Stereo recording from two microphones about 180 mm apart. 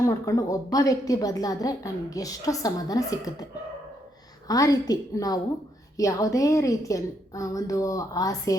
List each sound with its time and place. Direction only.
0.0 s a woman's voice: 15° left (ahead or behind)
4.4 s a woman's voice: 20° left (ahead or behind)